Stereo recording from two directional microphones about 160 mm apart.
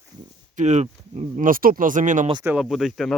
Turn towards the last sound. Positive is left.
turn(degrees=0)  # may be behind; listen again after turning